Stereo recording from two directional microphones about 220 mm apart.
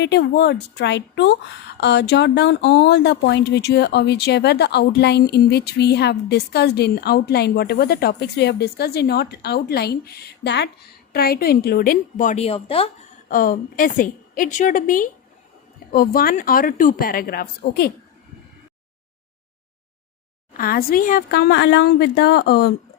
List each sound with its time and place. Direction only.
0.0 s a woman's voice: 50° left (ahead or behind); by 13.3 s 25° left (ahead or behind)
13.3 s a woman's voice: 40° left (ahead or behind)
20.6 s speech: 40° left (ahead or behind)